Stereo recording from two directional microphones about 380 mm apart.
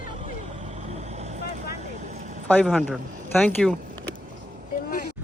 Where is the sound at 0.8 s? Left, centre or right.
Centre.